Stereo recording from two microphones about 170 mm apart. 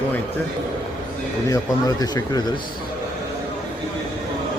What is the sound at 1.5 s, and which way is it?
Speech, 20° left (ahead or behind).